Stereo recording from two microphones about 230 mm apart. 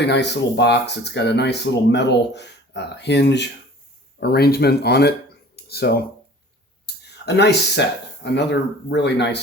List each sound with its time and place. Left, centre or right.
0.0 s speech: left
5.5 s a sound: left
6.8 s speech: left